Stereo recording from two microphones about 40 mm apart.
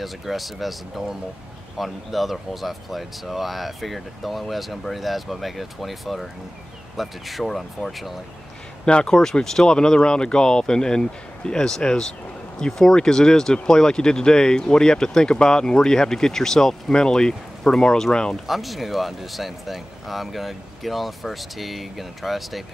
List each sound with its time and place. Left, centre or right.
0.0 s speech: centre
18.5 s speech: centre